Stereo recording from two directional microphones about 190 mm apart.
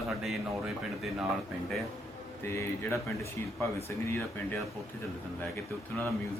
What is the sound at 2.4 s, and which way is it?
Speech, 15° left (ahead or behind).